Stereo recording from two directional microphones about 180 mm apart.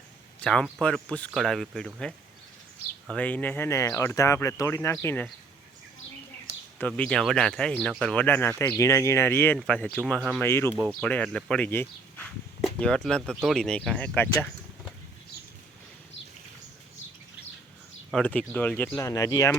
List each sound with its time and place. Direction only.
0.4 s speech: 5° left (ahead or behind)
6.5 s speech: 10° left (ahead or behind)
10.7 s speech: 20° right (ahead or behind)
11.0 s speech: 5° left (ahead or behind)
18.1 s speech: 5° left (ahead or behind)
18.9 s speech: 20° left (ahead or behind)